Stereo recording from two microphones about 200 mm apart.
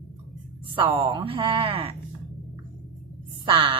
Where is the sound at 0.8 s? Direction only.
25° right (ahead or behind).